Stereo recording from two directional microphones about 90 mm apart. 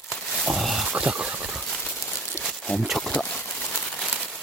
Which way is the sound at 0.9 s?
10° right (ahead or behind).